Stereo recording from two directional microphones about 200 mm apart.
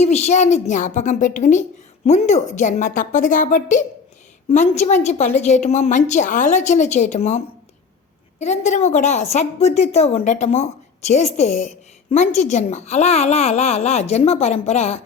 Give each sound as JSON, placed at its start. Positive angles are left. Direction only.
{"t": 0.0, "sound": "a woman's voice", "side_deg": 35}